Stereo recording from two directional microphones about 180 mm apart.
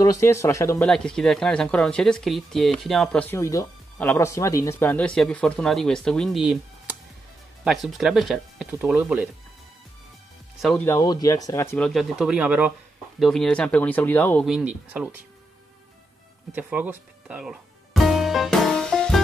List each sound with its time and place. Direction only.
0.0 s speech: 15° left (ahead or behind)
0.8 s speech: 5° left (ahead or behind)
10.6 s speech: 5° left (ahead or behind)
10.9 s speech: 20° left (ahead or behind)
11.9 s speech: centre (ahead or behind)
14.4 s speech: 5° right (ahead or behind)
16.5 s music: 10° right (ahead or behind)